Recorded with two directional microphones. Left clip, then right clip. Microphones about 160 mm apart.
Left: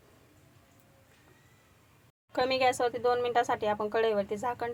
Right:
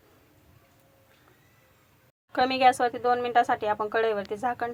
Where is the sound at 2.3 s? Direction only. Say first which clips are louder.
Right 5 dB; centre (ahead or behind).